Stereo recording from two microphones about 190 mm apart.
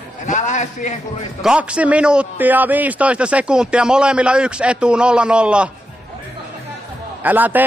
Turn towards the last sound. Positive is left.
turn(degrees=-10)  # may be behind; listen again after turning